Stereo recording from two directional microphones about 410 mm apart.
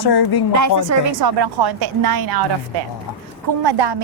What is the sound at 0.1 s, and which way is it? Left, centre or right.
Speech, left.